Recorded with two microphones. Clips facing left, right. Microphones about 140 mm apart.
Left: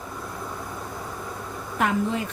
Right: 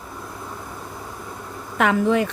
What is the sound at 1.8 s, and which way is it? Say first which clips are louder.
Speech: right 6 dB; 85° right.